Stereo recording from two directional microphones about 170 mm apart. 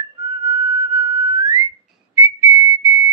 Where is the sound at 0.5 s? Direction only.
15° right (ahead or behind).